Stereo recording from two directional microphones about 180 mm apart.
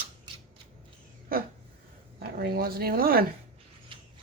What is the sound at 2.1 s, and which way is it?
Speech, 60° right (ahead or behind).